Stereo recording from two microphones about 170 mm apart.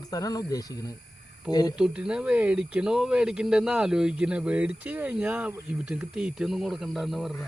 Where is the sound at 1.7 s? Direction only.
5° right (ahead or behind).